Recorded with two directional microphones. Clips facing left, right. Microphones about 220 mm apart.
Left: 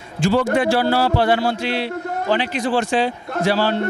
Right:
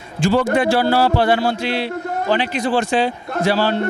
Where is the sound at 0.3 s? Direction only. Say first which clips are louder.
Right 1 dB; 20° right (ahead or behind).